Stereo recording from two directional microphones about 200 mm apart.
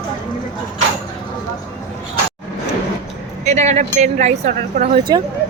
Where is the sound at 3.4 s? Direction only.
35° right (ahead or behind).